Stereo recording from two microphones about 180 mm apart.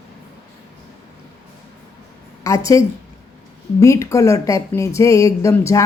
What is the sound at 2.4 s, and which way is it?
A woman's voice, 15° left (ahead or behind).